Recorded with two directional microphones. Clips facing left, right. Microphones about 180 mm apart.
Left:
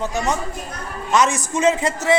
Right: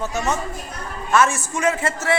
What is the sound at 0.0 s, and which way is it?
A man's voice, 15° left (ahead or behind).